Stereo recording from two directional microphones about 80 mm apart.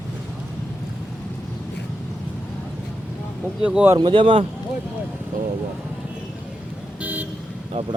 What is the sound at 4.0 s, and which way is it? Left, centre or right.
Speech, right.